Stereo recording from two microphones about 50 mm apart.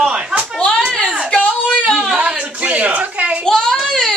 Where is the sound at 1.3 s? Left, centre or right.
Left.